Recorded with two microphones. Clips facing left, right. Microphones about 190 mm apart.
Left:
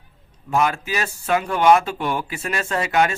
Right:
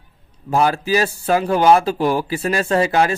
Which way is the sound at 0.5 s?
35° right (ahead or behind).